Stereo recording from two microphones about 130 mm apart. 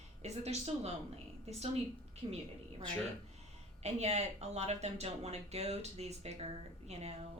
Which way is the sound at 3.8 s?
55° right (ahead or behind).